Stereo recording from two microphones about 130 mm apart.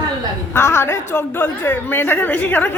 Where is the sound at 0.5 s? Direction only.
20° left (ahead or behind).